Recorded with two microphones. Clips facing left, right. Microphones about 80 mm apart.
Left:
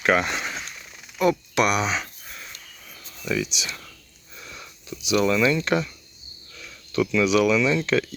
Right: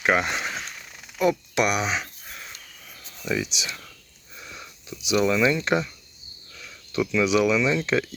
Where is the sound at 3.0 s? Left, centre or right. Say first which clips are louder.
Left 1 dB; right.